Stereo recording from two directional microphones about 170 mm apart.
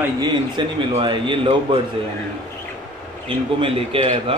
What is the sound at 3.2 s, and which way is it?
A man's voice, 30° right (ahead or behind).